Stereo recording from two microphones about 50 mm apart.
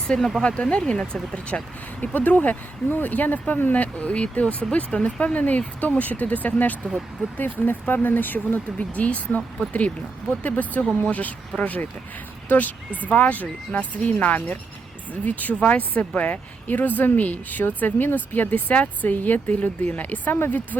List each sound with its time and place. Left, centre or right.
0.1 s speech: left